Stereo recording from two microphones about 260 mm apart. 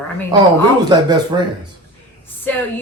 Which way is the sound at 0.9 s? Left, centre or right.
Centre.